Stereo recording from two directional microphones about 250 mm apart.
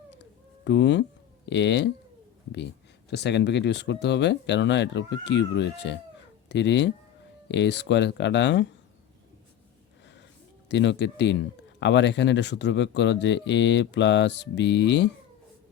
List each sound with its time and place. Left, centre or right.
0.2 s a sound: left
1.5 s speech: left
3.1 s speech: left
10.7 s speech: left